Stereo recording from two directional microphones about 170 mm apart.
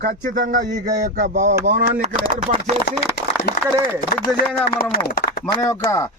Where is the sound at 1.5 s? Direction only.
70° right (ahead or behind).